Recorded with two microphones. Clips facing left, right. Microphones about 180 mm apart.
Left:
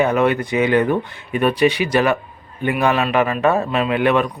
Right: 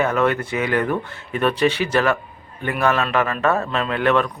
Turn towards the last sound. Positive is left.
turn(degrees=15)  # may be behind; listen again after turning